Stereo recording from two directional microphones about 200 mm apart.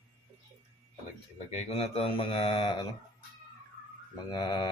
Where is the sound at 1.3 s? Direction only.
30° left (ahead or behind).